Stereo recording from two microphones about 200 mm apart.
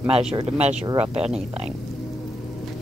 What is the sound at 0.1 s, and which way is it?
Speech, 30° right (ahead or behind).